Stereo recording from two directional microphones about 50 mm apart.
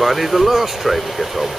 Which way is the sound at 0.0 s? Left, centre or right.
Centre.